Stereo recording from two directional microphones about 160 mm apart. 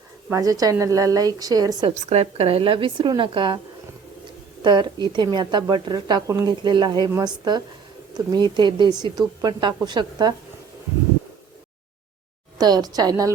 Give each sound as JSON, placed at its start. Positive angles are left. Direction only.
{"t": 0.3, "sound": "speech", "side_deg": -20}
{"t": 2.0, "sound": "speech", "side_deg": -40}
{"t": 4.6, "sound": "speech", "side_deg": -25}
{"t": 12.5, "sound": "speech", "side_deg": -25}